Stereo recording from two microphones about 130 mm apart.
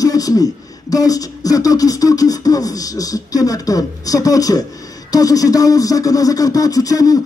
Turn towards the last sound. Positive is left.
turn(degrees=25)  # may be behind; listen again after turning